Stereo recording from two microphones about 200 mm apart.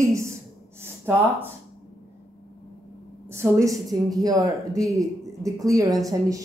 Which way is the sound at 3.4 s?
15° right (ahead or behind).